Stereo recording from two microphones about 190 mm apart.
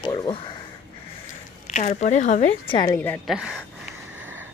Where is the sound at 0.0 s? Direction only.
25° left (ahead or behind).